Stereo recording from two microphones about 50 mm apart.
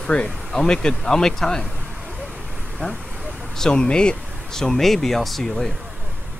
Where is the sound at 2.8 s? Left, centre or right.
Left; by 5.5 s centre.